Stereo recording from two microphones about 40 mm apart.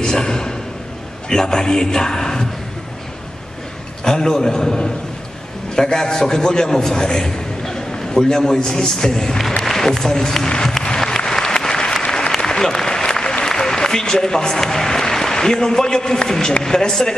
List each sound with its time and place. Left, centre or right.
0.0 s a sound: centre
1.3 s speech: centre
4.0 s a man's voice: centre
10.5 s music: left
11.0 s applause: centre